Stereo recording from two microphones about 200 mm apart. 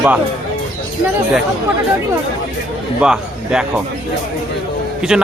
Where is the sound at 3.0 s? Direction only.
5° right (ahead or behind).